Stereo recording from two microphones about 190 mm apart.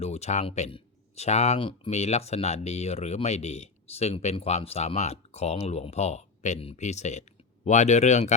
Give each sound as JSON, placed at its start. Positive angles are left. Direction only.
{"t": 0.0, "sound": "speech", "side_deg": 35}